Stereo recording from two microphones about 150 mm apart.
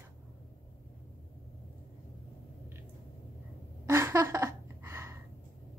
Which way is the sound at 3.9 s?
15° right (ahead or behind).